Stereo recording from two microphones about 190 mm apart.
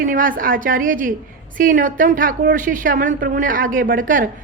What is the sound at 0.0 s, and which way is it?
A woman's voice, 45° right (ahead or behind).